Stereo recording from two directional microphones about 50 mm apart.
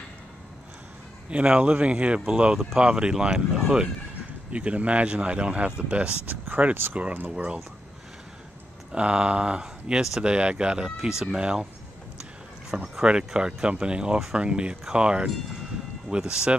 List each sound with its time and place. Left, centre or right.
1.3 s speech: right
4.5 s speech: right
6.2 s speech: right
7.2 s speech: right
8.9 s speech: right
13.0 s speech: centre